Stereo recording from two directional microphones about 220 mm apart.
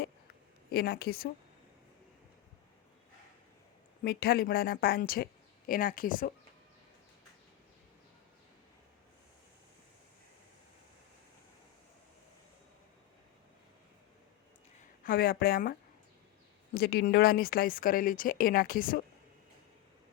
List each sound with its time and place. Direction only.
0.7 s a woman's voice: 45° left (ahead or behind)
4.0 s a woman's voice: 45° left (ahead or behind)
15.0 s a woman's voice: 40° left (ahead or behind)